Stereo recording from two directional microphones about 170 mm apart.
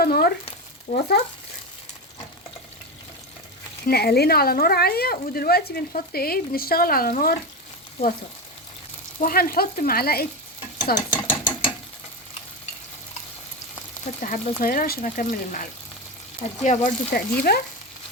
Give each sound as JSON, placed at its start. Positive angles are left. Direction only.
{"t": 0.0, "sound": "speech", "side_deg": 60}
{"t": 0.9, "sound": "speech", "side_deg": 40}
{"t": 3.8, "sound": "speech", "side_deg": 65}
{"t": 9.2, "sound": "speech", "side_deg": 60}
{"t": 10.9, "sound": "mechanisms", "side_deg": 25}
{"t": 14.0, "sound": "speech", "side_deg": 50}
{"t": 17.5, "sound": "speech", "side_deg": 65}